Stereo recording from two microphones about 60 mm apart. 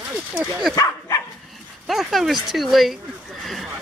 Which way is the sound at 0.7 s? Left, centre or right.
Left.